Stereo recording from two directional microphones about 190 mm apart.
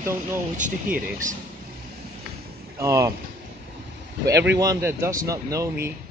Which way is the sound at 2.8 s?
15° right (ahead or behind).